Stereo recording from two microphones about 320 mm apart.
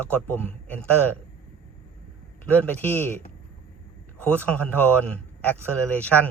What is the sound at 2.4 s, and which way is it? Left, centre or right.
Speech, centre.